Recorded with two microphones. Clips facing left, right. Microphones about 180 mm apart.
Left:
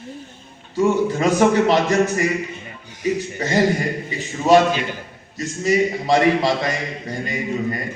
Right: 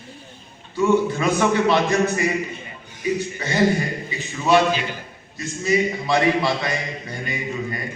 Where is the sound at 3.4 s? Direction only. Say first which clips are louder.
Left 1 dB; 40° left (ahead or behind).